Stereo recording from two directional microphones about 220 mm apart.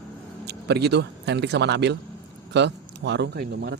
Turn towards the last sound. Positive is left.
turn(degrees=-50)  # may be behind; listen again after turning